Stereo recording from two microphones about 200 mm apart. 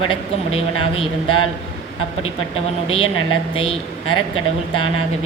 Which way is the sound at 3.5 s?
25° left (ahead or behind).